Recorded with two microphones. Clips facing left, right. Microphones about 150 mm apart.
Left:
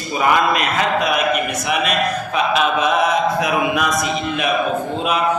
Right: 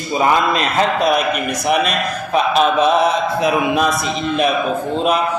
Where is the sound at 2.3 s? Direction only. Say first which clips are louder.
Right 5 dB; 35° right (ahead or behind).